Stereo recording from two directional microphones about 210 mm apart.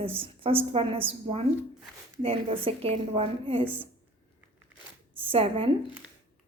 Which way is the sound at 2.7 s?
25° right (ahead or behind).